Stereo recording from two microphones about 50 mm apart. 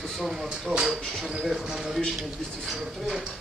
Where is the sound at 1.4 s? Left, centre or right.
Centre.